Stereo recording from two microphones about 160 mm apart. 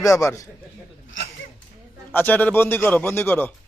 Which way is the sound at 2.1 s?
10° left (ahead or behind).